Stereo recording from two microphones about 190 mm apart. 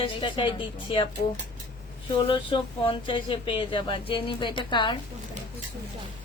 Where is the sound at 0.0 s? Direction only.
25° left (ahead or behind).